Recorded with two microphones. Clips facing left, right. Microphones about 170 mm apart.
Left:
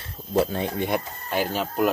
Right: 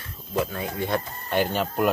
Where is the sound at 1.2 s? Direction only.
Centre (ahead or behind).